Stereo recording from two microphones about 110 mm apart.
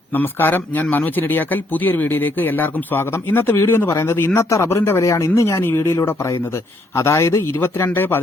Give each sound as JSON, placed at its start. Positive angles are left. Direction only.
{"t": 0.1, "sound": "a man's voice", "side_deg": 20}